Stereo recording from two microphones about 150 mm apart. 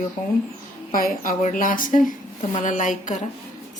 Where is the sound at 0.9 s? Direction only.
70° left (ahead or behind).